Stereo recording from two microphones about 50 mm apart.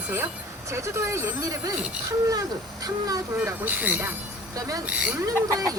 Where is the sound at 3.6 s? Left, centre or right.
Right.